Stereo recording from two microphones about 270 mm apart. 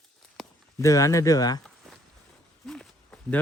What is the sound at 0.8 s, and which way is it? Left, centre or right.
Speech, centre.